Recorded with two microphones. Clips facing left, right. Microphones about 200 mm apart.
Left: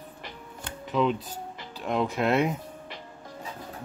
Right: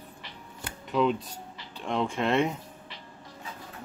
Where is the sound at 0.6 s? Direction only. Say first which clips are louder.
Even; centre (ahead or behind).